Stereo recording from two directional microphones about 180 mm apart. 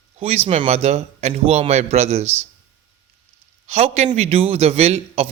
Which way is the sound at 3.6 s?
35° right (ahead or behind).